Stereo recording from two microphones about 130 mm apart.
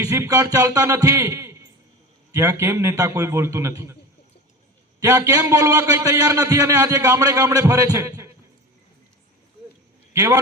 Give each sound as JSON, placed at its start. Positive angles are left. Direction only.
{"t": 0.0, "sound": "a man's voice", "side_deg": -25}
{"t": 4.9, "sound": "a man's voice", "side_deg": -25}
{"t": 10.1, "sound": "a man's voice", "side_deg": -25}